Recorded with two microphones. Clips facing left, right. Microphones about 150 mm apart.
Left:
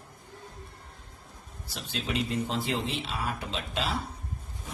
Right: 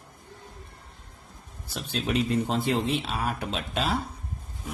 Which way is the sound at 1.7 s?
55° right (ahead or behind).